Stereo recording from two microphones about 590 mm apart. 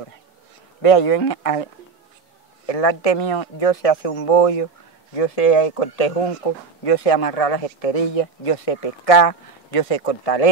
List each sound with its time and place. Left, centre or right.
0.8 s speech: left
2.6 s a man's voice: left
3.2 s speech: left
5.1 s speech: left
6.8 s speech: left